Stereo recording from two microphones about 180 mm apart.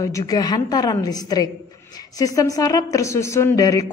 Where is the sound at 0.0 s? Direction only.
20° left (ahead or behind).